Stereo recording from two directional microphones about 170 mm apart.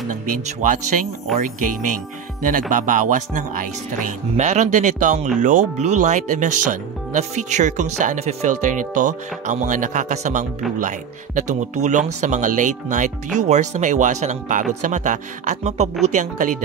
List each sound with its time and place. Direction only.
0.1 s speech: 50° right (ahead or behind)